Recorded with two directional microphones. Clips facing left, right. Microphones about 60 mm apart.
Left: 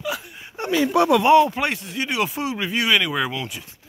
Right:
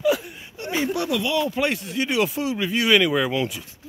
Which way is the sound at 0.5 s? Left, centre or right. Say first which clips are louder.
Left 6 dB; left.